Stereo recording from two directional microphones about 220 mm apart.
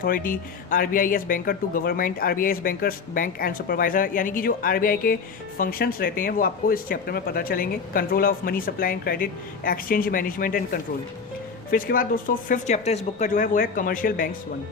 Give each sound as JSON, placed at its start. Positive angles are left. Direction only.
{"t": 0.0, "sound": "speech", "side_deg": 40}